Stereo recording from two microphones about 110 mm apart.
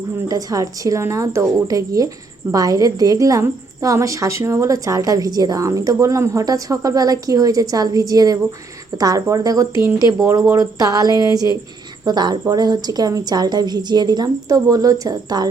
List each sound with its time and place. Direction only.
0.3 s a woman's voice: 35° right (ahead or behind)